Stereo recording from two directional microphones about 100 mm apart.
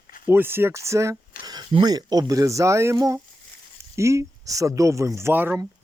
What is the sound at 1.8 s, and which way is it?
Speech, 40° right (ahead or behind).